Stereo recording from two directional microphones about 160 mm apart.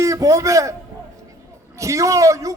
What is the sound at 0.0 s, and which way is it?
Speech, 20° right (ahead or behind).